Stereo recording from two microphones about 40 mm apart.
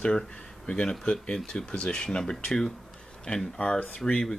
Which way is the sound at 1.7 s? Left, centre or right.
Left.